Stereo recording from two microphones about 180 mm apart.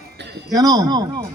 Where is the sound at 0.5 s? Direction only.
20° right (ahead or behind).